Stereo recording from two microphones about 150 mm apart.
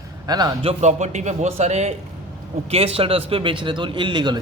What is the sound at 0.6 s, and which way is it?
A man's voice, 50° right (ahead or behind).